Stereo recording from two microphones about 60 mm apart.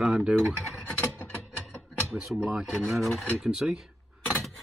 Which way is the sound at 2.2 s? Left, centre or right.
Centre.